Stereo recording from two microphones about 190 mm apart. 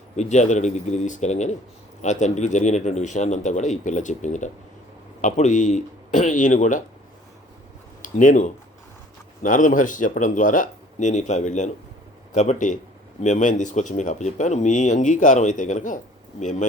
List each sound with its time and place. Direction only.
0.2 s speech: 35° left (ahead or behind)
8.0 s speech: 40° left (ahead or behind)